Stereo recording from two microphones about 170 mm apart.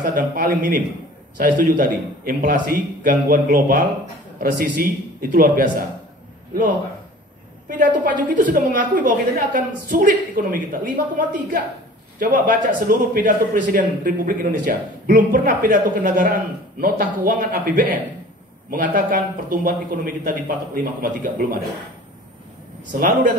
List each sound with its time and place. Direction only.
0.0 s a man's voice: 50° right (ahead or behind)
7.6 s a man's voice: 55° right (ahead or behind)
22.9 s a man's voice: 50° right (ahead or behind)